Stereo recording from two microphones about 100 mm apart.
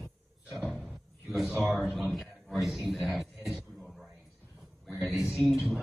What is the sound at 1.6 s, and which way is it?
Speech, centre (ahead or behind).